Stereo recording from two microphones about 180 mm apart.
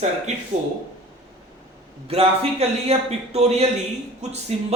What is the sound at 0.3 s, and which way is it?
Speech, 40° right (ahead or behind).